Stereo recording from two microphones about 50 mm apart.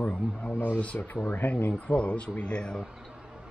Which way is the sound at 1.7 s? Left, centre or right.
Left.